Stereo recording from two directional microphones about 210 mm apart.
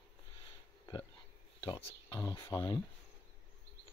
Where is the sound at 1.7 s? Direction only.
15° left (ahead or behind).